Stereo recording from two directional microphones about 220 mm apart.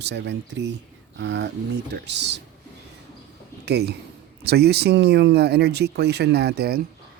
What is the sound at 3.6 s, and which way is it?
Speech, 50° right (ahead or behind).